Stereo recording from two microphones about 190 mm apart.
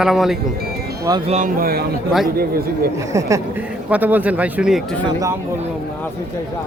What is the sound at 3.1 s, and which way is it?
Speech, 15° right (ahead or behind).